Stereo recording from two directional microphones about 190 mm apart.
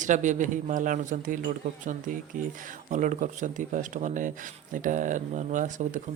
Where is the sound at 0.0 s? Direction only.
40° right (ahead or behind).